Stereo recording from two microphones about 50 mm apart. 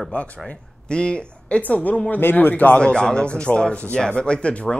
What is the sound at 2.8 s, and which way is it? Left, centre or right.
Speech, centre.